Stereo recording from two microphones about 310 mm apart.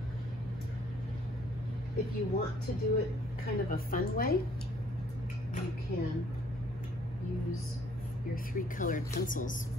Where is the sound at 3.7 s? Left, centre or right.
Left.